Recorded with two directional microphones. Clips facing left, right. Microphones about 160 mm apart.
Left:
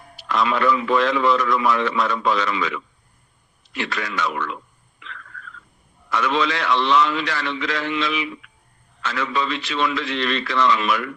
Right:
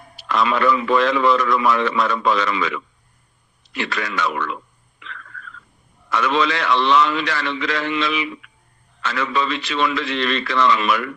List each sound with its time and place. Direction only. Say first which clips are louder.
0.3 s a man's voice: right 1 dB; 75° right (ahead or behind)
6.1 s a man's voice: right 2 dB; 75° right (ahead or behind)